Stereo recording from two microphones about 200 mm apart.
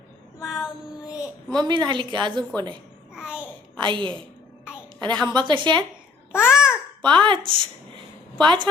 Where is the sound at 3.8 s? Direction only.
25° right (ahead or behind).